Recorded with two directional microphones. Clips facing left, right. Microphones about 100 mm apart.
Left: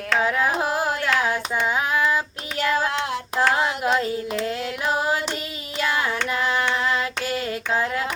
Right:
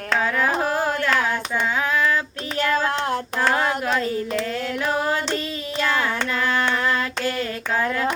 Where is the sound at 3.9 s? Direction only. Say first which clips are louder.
Even; 20° left (ahead or behind).